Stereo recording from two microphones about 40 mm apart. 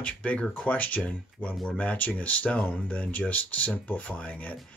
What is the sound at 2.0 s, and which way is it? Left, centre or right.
Speech, left.